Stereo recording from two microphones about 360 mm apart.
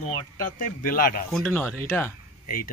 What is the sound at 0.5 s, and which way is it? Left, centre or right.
Speech, left.